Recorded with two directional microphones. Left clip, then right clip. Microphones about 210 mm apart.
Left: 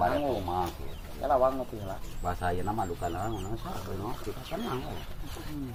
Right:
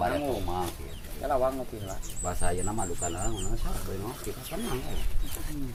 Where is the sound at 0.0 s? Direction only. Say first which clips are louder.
Left 1 dB; 15° right (ahead or behind).